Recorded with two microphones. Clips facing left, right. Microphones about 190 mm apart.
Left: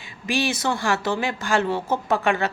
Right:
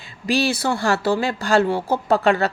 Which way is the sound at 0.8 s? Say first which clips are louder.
Right 4 dB; 35° right (ahead or behind).